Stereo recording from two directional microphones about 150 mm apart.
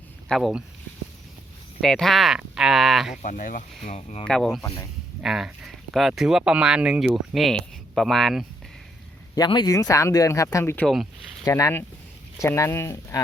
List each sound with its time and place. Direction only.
0.3 s speech: centre (ahead or behind)
1.8 s speech: centre (ahead or behind)
3.2 s speech: 60° left (ahead or behind)
4.2 s speech: 5° left (ahead or behind)
9.3 s speech: 25° left (ahead or behind)
10.8 s speech: centre (ahead or behind)
11.4 s speech: 20° left (ahead or behind)